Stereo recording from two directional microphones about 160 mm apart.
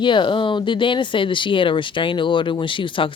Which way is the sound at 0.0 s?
30° left (ahead or behind).